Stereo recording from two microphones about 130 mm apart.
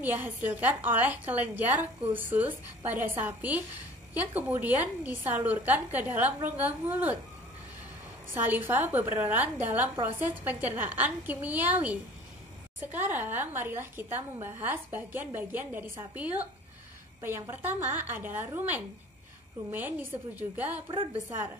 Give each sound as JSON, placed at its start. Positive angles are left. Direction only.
{"t": 0.0, "sound": "a woman's voice", "side_deg": -15}
{"t": 8.5, "sound": "a woman's voice", "side_deg": -15}